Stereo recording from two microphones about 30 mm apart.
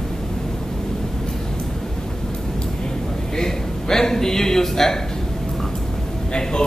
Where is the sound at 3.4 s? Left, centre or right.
Centre.